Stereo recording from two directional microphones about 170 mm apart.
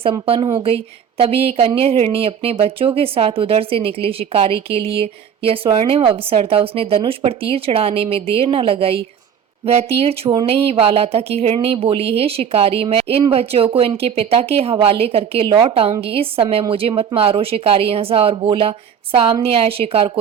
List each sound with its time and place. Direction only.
0.0 s speech: 35° right (ahead or behind)